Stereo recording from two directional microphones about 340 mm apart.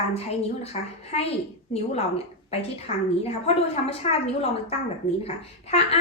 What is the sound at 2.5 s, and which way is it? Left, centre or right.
A woman's voice, centre.